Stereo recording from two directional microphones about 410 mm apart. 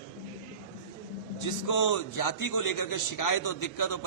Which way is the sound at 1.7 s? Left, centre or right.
Left.